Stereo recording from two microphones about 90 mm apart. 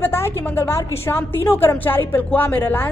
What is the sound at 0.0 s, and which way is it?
A woman's voice, 30° left (ahead or behind).